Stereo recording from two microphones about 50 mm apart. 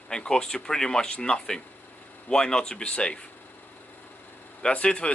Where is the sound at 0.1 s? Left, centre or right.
Centre.